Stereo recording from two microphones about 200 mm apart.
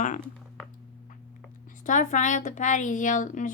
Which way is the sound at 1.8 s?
40° left (ahead or behind).